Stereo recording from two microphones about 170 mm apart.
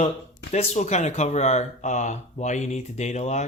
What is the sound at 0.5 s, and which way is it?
Speech, 40° left (ahead or behind).